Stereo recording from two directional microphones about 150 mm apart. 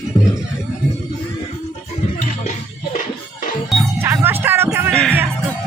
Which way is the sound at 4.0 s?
15° right (ahead or behind).